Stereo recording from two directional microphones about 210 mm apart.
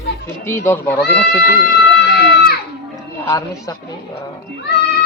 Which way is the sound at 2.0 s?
50° left (ahead or behind).